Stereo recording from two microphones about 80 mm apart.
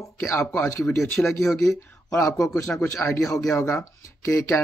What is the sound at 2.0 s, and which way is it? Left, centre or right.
Speech, left.